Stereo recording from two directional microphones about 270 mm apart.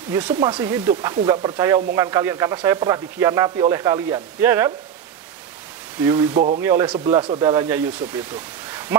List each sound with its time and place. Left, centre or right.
0.1 s speech: centre
6.0 s speech: centre
6.6 s speech: centre
8.6 s a sound: centre